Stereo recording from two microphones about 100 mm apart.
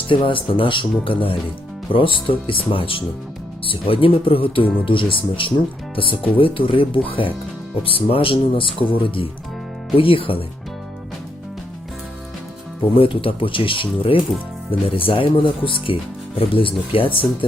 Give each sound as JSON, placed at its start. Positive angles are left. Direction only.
{"t": 0.1, "sound": "speech", "side_deg": 60}
{"t": 13.0, "sound": "speech", "side_deg": 65}